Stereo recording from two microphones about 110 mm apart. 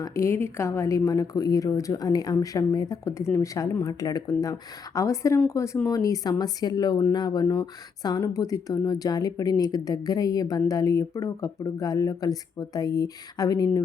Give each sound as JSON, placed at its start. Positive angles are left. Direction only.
{"t": 0.0, "sound": "a woman's voice", "side_deg": 25}